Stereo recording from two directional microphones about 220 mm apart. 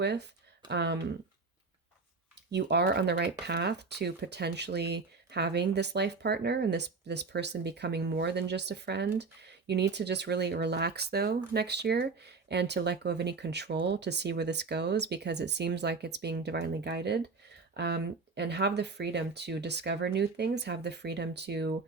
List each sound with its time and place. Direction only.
0.0 s speech: 50° right (ahead or behind)
2.5 s speech: 50° right (ahead or behind)